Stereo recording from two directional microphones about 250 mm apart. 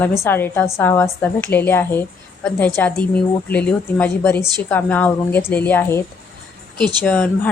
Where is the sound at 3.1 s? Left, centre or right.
Centre.